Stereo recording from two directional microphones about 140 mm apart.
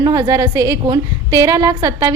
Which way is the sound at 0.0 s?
25° right (ahead or behind).